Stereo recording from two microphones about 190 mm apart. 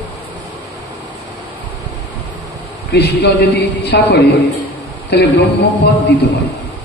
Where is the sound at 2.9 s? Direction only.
60° left (ahead or behind).